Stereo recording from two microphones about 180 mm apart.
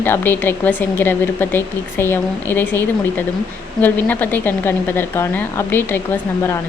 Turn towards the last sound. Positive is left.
turn(degrees=10)  # may be behind; listen again after turning